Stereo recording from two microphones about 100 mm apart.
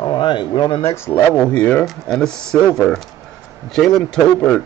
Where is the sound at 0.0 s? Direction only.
50° left (ahead or behind).